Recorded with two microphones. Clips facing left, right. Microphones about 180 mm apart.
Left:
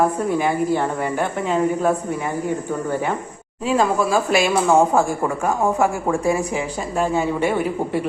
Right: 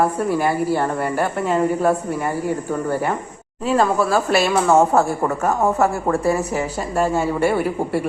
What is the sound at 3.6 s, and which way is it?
Speech, 10° left (ahead or behind).